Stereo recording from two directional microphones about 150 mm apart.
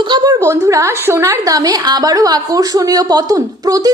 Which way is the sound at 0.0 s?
30° right (ahead or behind).